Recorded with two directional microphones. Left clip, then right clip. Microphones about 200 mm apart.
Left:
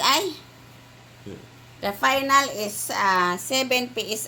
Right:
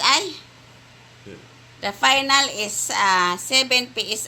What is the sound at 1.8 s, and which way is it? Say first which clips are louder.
A woman's voice: right 3 dB; 5° right (ahead or behind).